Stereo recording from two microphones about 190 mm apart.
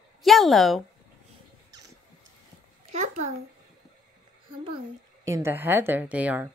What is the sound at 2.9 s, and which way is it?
Speech, 40° right (ahead or behind).